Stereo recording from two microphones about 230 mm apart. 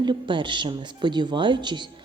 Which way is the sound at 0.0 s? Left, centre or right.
Right.